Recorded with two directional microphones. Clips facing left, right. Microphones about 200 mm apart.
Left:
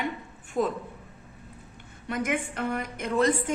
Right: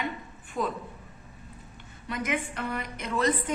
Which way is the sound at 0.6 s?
40° left (ahead or behind).